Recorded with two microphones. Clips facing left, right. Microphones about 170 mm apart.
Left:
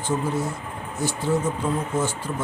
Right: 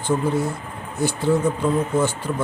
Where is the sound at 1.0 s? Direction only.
60° right (ahead or behind).